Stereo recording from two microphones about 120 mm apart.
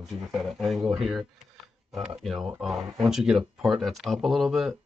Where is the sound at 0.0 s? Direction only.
Centre (ahead or behind).